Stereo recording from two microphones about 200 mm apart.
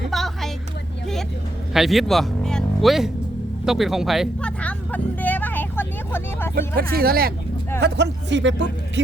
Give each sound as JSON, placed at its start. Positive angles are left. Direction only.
{"t": 0.1, "sound": "a sound", "side_deg": 0}
{"t": 1.7, "sound": "speech", "side_deg": 0}
{"t": 3.7, "sound": "vehicle", "side_deg": 0}
{"t": 6.7, "sound": "speech", "side_deg": -50}